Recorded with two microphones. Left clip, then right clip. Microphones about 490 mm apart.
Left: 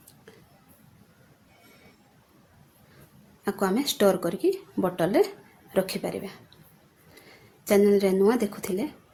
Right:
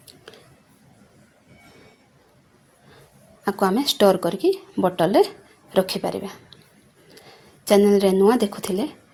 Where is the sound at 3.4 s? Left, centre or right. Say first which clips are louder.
Right 5 dB; left.